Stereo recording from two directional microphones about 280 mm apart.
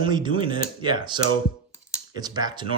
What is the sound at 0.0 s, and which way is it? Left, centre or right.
Speech, centre.